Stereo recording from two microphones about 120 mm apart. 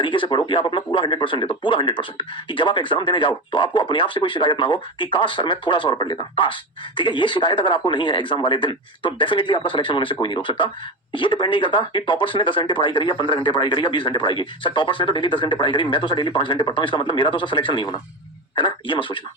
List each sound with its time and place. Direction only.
0.0 s speech: 45° left (ahead or behind)